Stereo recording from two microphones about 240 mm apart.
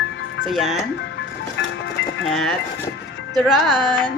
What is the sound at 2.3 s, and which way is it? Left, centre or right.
Speech, centre.